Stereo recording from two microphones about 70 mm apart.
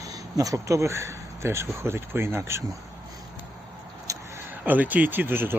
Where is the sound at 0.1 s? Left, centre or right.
Right.